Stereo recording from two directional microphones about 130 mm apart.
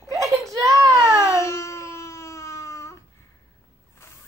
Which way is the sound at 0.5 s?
20° right (ahead or behind).